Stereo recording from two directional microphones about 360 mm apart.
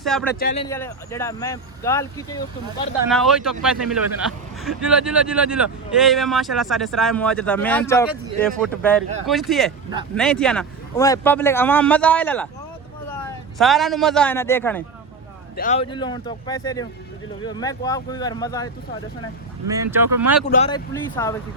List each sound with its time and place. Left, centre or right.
0.0 s speech: centre
0.3 s a man's voice: left
0.6 s speech: centre
13.6 s speech: centre
15.5 s speech: centre
19.7 s speech: centre
20.5 s speech: centre